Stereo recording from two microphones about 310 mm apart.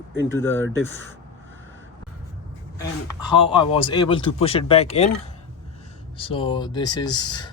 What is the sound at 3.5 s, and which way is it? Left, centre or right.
Speech, centre.